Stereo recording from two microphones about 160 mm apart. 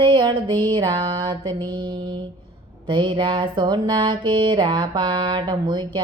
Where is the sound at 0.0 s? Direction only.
30° right (ahead or behind).